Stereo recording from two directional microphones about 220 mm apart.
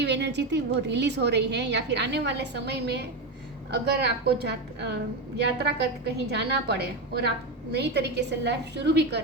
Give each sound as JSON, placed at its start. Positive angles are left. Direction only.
{"t": 0.0, "sound": "a woman's voice", "side_deg": -50}